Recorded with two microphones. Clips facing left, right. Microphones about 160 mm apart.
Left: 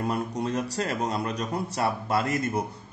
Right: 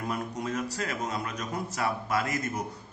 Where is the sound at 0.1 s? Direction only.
35° left (ahead or behind).